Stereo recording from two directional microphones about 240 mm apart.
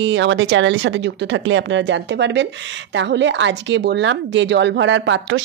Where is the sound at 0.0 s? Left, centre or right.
Right.